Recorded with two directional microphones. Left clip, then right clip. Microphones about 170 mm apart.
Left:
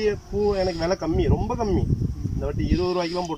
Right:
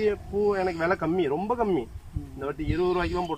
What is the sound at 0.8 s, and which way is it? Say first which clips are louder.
Speech: left 1 dB; 15° left (ahead or behind).